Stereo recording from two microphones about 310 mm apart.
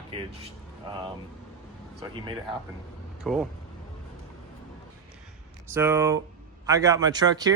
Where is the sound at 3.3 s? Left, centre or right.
Centre.